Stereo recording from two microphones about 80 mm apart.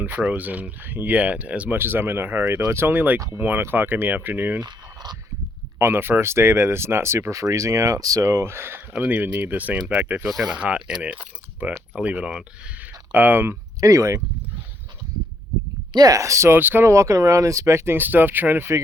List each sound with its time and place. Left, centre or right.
0.2 s speech: centre
1.8 s speech: right
5.8 s speech: right
10.2 s speech: centre
10.5 s speech: centre
12.8 s a sound: right
13.8 s speech: right
15.9 s speech: right
16.9 s speech: right